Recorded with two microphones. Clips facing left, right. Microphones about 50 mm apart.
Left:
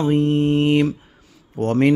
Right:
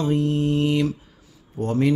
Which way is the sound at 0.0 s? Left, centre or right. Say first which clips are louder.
Left 4 dB; left.